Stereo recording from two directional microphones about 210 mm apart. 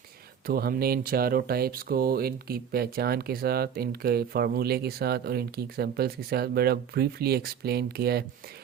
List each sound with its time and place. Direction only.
0.4 s speech: 45° right (ahead or behind)